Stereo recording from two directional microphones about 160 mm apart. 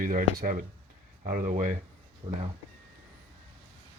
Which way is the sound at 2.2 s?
35° right (ahead or behind).